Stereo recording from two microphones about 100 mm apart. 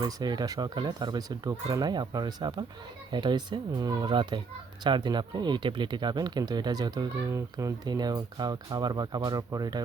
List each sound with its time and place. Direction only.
0.0 s speech: 45° right (ahead or behind)